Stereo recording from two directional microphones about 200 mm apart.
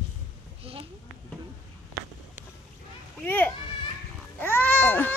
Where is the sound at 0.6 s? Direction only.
30° right (ahead or behind).